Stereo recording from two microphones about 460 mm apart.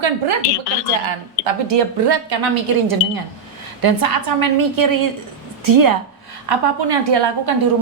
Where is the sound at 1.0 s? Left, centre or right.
Right.